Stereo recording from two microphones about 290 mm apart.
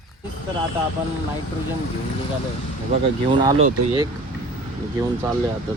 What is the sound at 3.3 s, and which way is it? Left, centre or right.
Speech, centre.